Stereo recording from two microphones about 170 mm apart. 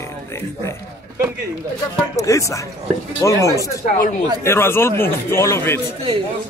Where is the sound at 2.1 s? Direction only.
20° left (ahead or behind).